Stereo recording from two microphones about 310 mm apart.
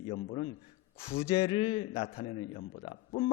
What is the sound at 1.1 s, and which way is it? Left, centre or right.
A man's voice, centre.